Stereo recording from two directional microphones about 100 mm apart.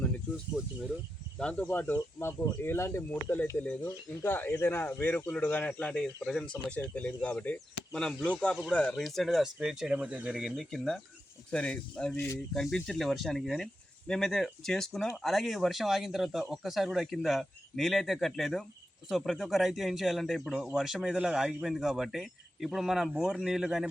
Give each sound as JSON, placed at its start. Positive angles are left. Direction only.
{"t": 0.3, "sound": "speech", "side_deg": -5}
{"t": 1.4, "sound": "speech", "side_deg": 10}
{"t": 1.9, "sound": "speech", "side_deg": 30}
{"t": 4.2, "sound": "speech", "side_deg": 20}
{"t": 9.0, "sound": "speech", "side_deg": 0}
{"t": 12.1, "sound": "speech", "side_deg": 25}
{"t": 12.5, "sound": "speech", "side_deg": 5}